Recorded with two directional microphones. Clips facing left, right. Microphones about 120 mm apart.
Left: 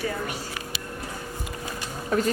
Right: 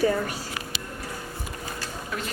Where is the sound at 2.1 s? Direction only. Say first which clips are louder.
Left 11 dB; 40° left (ahead or behind).